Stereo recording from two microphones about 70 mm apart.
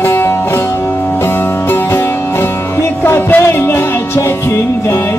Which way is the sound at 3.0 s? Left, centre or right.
Left.